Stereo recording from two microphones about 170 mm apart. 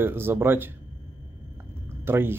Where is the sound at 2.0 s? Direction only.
15° right (ahead or behind).